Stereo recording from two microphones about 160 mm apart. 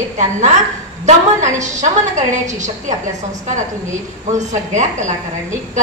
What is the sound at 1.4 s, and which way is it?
Speech, 50° right (ahead or behind).